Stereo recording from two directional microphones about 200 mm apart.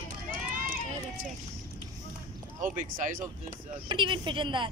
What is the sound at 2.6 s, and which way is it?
Speech, 40° right (ahead or behind).